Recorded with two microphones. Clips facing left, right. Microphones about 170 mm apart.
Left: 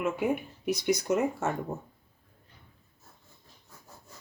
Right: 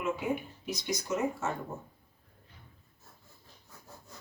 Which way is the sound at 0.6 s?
60° left (ahead or behind).